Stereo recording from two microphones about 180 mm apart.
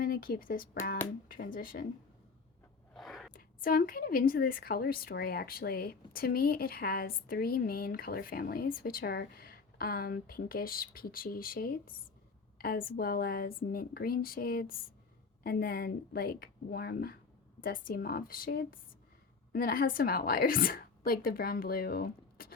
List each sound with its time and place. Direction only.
0.0 s a woman's voice: 55° left (ahead or behind)
2.9 s a sound: centre (ahead or behind)
3.3 s a woman's voice: 50° left (ahead or behind)